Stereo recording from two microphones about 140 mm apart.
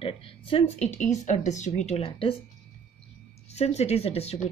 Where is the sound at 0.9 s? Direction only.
60° left (ahead or behind); by 2.3 s 40° left (ahead or behind).